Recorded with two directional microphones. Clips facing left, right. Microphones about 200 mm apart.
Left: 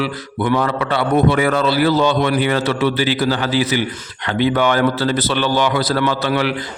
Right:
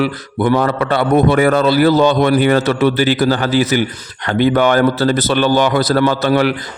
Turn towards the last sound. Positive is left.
turn(degrees=-45)  # may be behind; listen again after turning